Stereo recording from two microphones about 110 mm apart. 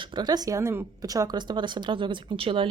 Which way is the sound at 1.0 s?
35° right (ahead or behind).